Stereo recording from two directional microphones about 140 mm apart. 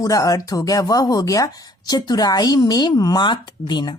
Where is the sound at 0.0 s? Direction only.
25° left (ahead or behind).